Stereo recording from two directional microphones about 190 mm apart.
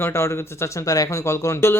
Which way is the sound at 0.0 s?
15° left (ahead or behind).